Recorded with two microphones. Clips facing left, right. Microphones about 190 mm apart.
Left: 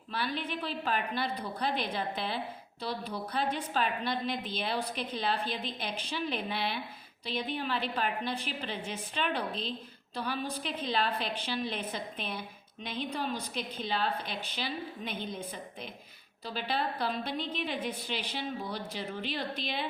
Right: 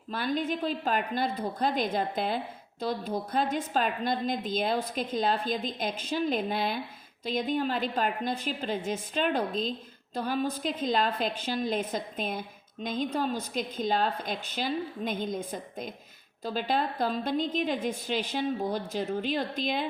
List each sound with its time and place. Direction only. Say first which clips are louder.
0.1 s a woman's voice: right 5 dB; 45° right (ahead or behind)